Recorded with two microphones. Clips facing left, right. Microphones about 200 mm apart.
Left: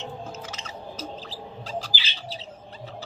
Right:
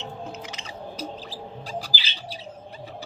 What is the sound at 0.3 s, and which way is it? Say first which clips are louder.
Bird: even; 15° right (ahead or behind).